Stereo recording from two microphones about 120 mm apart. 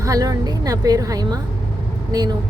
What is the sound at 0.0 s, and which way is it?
Speech, 30° right (ahead or behind).